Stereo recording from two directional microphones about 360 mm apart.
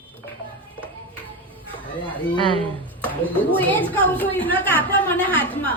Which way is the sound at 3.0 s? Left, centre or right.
Centre.